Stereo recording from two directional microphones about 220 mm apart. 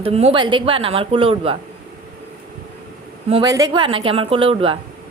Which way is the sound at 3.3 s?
20° right (ahead or behind).